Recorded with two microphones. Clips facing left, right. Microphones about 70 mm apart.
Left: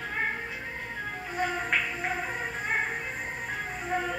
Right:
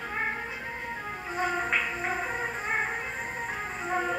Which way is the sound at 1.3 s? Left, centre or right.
Right.